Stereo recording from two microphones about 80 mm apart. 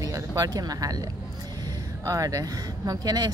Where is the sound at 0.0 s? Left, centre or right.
Right.